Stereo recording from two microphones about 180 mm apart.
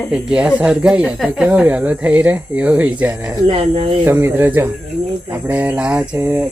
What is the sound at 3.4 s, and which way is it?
Speech, 35° right (ahead or behind).